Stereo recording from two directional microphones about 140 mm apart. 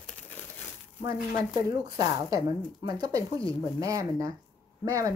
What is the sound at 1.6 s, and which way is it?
Speech, 25° right (ahead or behind).